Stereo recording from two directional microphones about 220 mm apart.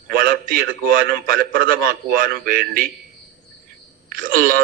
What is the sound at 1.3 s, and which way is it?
Speech, 40° right (ahead or behind).